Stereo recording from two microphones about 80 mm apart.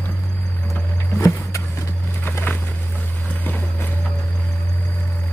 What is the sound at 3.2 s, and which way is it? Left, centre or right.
Vehicle, left.